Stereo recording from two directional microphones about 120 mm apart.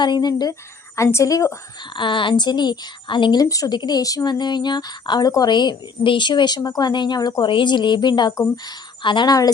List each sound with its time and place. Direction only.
0.0 s a woman's voice: 35° left (ahead or behind)
1.8 s a woman's voice: 40° left (ahead or behind)
3.4 s a woman's voice: 30° left (ahead or behind)